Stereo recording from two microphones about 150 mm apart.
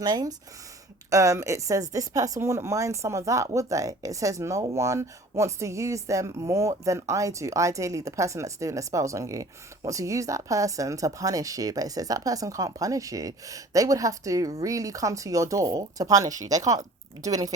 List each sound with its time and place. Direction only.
0.0 s speech: 25° right (ahead or behind)